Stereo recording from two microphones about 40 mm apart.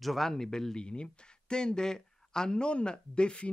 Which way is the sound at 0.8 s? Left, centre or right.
Left.